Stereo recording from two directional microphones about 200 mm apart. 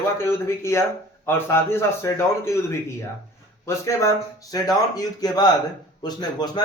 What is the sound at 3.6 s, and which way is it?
Speech, 15° left (ahead or behind).